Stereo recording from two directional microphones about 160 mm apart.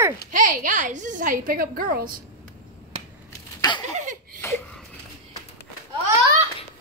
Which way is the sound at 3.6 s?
25° left (ahead or behind).